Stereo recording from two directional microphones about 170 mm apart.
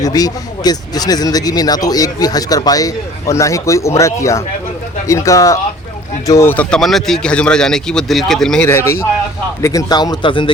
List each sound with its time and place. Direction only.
0.0 s speech: 20° left (ahead or behind)